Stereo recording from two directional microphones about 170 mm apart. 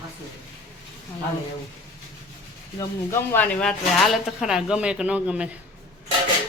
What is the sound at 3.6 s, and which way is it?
Speech, 5° left (ahead or behind).